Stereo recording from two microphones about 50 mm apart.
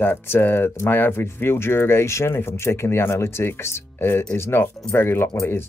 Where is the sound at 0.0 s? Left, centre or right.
Left.